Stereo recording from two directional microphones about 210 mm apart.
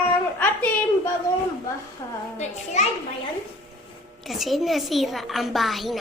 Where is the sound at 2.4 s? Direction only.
35° left (ahead or behind).